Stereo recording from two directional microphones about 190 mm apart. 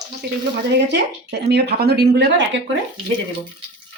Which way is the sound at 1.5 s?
55° right (ahead or behind).